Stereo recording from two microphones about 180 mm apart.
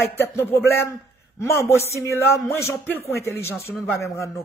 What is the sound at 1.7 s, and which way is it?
Speech, 15° left (ahead or behind).